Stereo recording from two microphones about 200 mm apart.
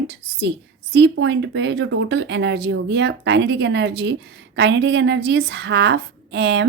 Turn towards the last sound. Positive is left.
turn(degrees=-55)  # may be behind; listen again after turning